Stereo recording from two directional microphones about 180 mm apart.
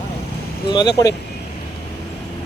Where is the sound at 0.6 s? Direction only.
25° left (ahead or behind).